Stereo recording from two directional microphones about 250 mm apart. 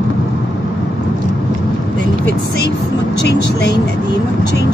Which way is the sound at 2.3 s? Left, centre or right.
Left.